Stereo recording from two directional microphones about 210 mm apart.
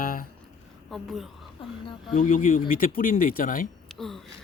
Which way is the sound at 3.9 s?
Centre (ahead or behind).